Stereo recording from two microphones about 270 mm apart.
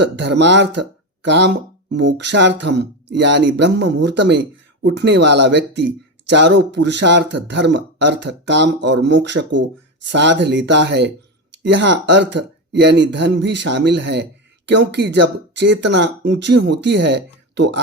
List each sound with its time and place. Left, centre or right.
0.3 s speech: right
12.4 s speech: right
12.7 s speech: right